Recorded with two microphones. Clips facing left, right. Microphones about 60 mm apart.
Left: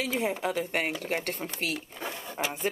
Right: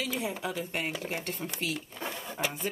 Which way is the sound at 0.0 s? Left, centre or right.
Left.